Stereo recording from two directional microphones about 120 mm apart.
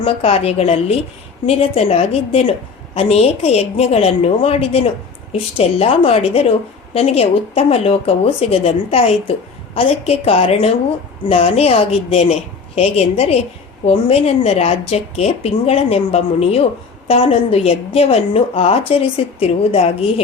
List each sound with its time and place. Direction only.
0.0 s a woman's voice: 55° left (ahead or behind)